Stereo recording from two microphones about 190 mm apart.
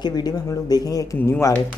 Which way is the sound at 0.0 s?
20° left (ahead or behind).